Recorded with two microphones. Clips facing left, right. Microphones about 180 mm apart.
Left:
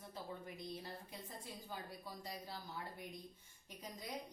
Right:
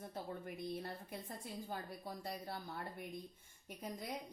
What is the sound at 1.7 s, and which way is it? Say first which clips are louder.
Speech: right 1 dB; 55° right (ahead or behind).